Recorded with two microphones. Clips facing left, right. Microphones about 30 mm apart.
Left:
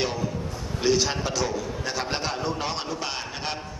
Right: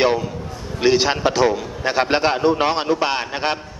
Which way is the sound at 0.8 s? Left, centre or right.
Right.